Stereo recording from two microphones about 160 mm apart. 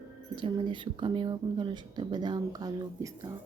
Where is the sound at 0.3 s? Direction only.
30° right (ahead or behind).